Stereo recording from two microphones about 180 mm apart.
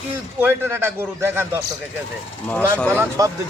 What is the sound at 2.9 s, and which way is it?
Speech, 15° right (ahead or behind).